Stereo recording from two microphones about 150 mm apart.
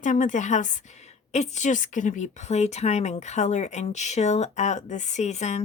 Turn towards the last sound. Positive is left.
turn(degrees=50)  # may be behind; listen again after turning